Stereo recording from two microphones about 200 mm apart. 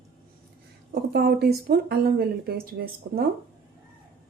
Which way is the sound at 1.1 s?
55° right (ahead or behind).